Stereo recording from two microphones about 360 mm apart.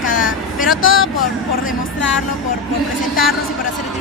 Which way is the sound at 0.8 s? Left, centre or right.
Left.